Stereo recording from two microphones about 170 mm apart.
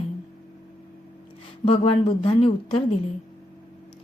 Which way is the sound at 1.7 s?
40° left (ahead or behind).